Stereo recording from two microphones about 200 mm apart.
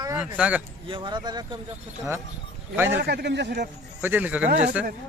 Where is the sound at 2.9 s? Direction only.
55° right (ahead or behind).